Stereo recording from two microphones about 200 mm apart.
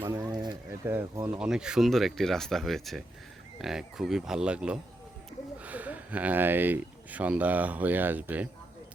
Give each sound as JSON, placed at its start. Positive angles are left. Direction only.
{"t": 0.0, "sound": "speech", "side_deg": -20}
{"t": 1.4, "sound": "speech", "side_deg": -5}